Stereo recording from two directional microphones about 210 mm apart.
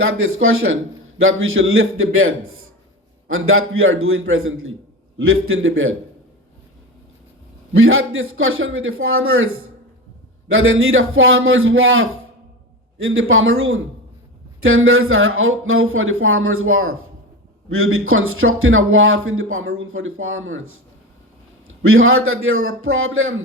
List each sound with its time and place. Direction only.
0.0 s speech: 75° right (ahead or behind)
7.7 s speech: 75° right (ahead or behind)
10.5 s speech: 75° right (ahead or behind)
21.8 s speech: 75° right (ahead or behind)